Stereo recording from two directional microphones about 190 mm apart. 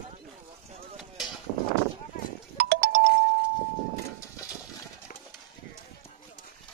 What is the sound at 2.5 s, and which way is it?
Music, 55° right (ahead or behind).